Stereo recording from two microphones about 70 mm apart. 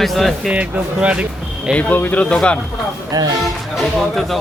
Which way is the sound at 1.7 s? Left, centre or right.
Left.